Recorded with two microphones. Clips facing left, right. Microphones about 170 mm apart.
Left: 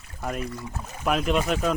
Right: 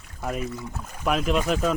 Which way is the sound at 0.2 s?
Centre (ahead or behind).